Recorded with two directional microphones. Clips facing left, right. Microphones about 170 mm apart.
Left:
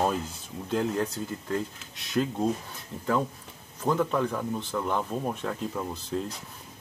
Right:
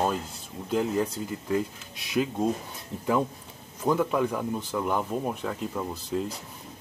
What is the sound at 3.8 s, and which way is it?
Speech, 10° right (ahead or behind).